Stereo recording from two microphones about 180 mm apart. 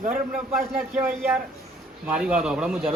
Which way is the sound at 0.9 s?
10° right (ahead or behind).